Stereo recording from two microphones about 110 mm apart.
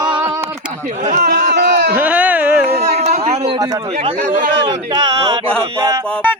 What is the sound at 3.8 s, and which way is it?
Speech, 60° right (ahead or behind).